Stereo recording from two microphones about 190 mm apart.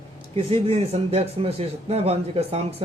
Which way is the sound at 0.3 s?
30° right (ahead or behind).